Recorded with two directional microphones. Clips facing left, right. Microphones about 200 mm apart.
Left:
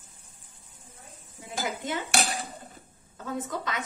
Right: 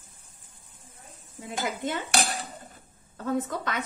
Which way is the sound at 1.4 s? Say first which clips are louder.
Right 2 dB; 60° right (ahead or behind).